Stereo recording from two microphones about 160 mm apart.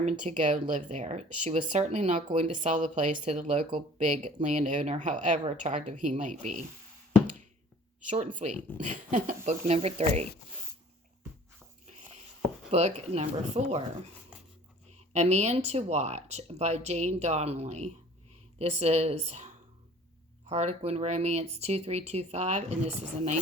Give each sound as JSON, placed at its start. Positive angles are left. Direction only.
{"t": 0.0, "sound": "speech", "side_deg": -50}
{"t": 3.7, "sound": "speech", "side_deg": -35}
{"t": 4.0, "sound": "speech", "side_deg": -50}
{"t": 8.1, "sound": "speech", "side_deg": -50}
{"t": 12.7, "sound": "speech", "side_deg": -40}
{"t": 14.9, "sound": "speech", "side_deg": -45}
{"t": 20.5, "sound": "speech", "side_deg": -40}